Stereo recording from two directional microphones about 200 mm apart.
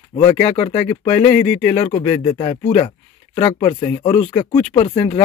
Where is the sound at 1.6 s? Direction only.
25° left (ahead or behind).